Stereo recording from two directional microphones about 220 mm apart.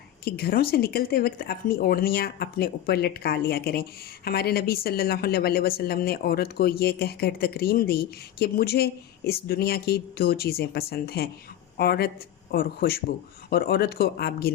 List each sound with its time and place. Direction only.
0.3 s speech: 45° left (ahead or behind)